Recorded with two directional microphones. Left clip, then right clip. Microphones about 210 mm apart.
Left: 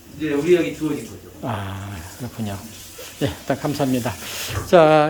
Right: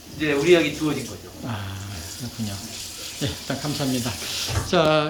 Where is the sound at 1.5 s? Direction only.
20° left (ahead or behind).